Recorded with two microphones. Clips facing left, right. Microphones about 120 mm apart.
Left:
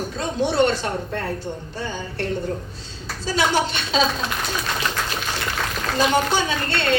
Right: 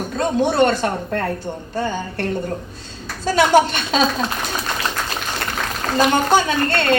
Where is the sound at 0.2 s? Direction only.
50° right (ahead or behind).